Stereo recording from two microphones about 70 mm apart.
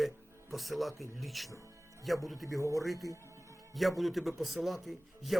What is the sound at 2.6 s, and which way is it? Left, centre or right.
Speech, right.